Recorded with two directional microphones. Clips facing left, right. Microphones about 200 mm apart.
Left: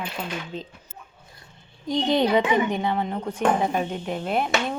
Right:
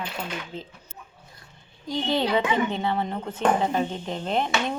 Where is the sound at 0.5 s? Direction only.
20° left (ahead or behind).